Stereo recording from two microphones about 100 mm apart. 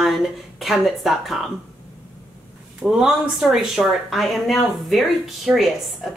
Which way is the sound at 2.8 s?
5° right (ahead or behind).